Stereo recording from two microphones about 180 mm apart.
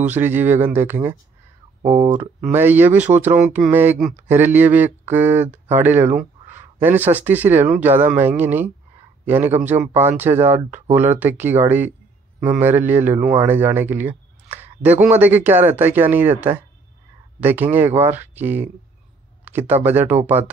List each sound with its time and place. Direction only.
0.0 s speech: 10° right (ahead or behind)
1.8 s speech: 40° right (ahead or behind)
2.5 s a man's voice: 10° right (ahead or behind)